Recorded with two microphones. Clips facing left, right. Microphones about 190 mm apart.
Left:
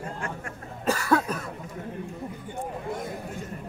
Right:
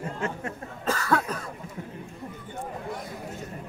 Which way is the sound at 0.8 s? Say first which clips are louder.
Left 2 dB; 10° left (ahead or behind).